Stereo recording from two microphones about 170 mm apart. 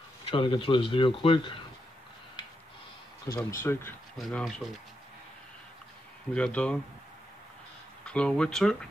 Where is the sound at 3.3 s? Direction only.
15° left (ahead or behind).